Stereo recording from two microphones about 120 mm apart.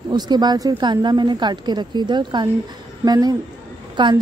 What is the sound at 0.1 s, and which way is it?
Speech, 35° right (ahead or behind).